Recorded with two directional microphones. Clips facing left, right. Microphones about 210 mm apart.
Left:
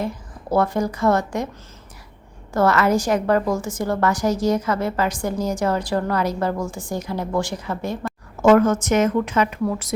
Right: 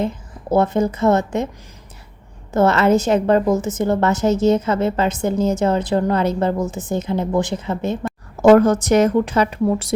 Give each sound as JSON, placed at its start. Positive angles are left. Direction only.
{"t": 0.0, "sound": "a woman's voice", "side_deg": -20}
{"t": 2.5, "sound": "a woman's voice", "side_deg": -25}
{"t": 8.4, "sound": "a woman's voice", "side_deg": -35}